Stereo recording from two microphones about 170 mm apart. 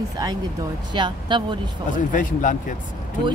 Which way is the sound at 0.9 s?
25° right (ahead or behind).